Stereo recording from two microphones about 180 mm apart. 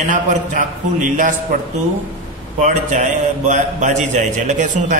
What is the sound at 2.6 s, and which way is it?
A man's voice, 45° right (ahead or behind).